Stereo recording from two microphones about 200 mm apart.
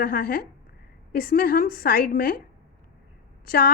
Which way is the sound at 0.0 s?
45° left (ahead or behind).